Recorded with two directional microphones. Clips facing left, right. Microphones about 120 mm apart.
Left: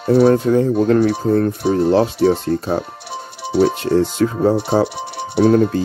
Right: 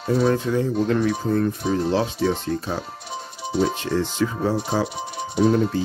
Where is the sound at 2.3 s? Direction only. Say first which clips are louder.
Left 7 dB; 40° left (ahead or behind).